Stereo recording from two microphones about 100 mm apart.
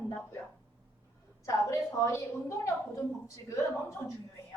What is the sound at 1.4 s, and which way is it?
A woman's voice, 30° left (ahead or behind).